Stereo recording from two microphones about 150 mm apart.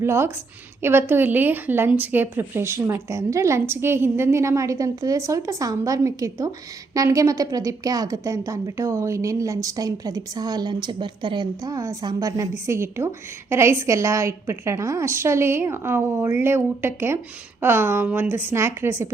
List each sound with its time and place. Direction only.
0.0 s a woman's voice: 15° right (ahead or behind)